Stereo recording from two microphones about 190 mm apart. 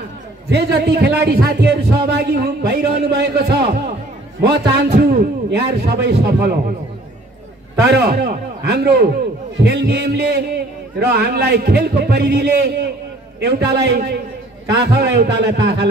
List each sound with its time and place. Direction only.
0.5 s a man's voice: 60° right (ahead or behind)
7.9 s a man's voice: 55° right (ahead or behind)